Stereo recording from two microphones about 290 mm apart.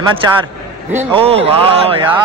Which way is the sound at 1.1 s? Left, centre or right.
Centre.